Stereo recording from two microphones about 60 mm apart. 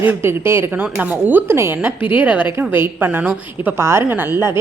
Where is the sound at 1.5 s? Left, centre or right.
Right.